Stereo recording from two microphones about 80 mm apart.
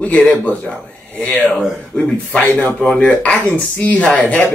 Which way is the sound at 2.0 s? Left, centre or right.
Centre.